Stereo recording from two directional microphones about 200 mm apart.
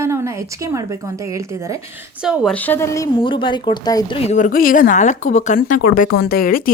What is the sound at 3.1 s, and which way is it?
Speech, 25° left (ahead or behind).